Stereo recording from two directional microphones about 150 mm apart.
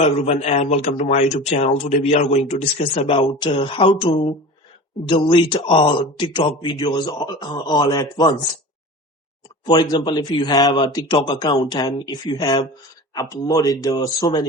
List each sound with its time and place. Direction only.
0.2 s a man's voice: 45° left (ahead or behind); by 8.4 s 25° left (ahead or behind)
9.9 s speech: 30° left (ahead or behind)